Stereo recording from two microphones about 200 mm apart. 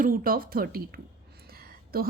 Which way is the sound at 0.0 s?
45° right (ahead or behind).